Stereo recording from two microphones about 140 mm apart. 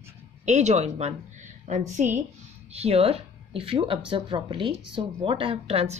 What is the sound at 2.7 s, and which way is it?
A woman's voice, 45° right (ahead or behind).